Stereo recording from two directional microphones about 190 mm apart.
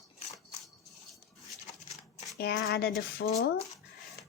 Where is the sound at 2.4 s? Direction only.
55° left (ahead or behind).